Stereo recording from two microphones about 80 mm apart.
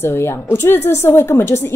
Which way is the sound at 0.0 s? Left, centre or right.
Left.